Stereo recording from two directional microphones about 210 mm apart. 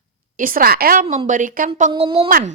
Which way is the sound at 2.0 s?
25° right (ahead or behind).